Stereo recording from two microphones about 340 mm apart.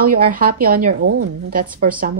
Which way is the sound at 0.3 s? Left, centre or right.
Right.